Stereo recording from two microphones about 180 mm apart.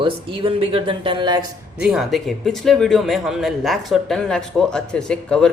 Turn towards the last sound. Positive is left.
turn(degrees=5)  # may be behind; listen again after turning